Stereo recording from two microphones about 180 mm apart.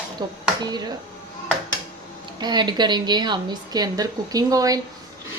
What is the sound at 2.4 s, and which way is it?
A woman's voice, 25° right (ahead or behind).